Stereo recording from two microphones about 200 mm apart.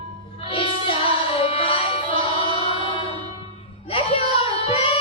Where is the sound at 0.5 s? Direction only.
25° left (ahead or behind).